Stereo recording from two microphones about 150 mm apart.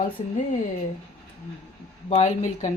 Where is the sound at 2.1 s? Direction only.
50° left (ahead or behind).